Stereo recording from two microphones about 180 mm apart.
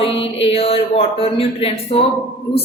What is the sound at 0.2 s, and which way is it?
A woman's voice, 30° left (ahead or behind).